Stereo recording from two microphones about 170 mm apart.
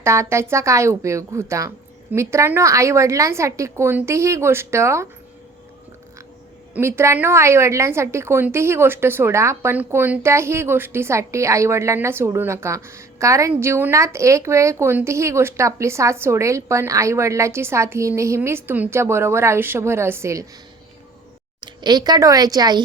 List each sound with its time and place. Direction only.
0.0 s speech: 15° right (ahead or behind)
6.7 s speech: 15° right (ahead or behind)
21.6 s speech: 25° right (ahead or behind)